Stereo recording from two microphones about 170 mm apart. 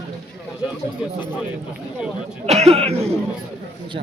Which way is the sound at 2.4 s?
40° right (ahead or behind).